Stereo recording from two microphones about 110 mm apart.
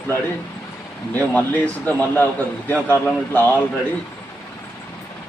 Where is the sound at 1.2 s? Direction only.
15° left (ahead or behind).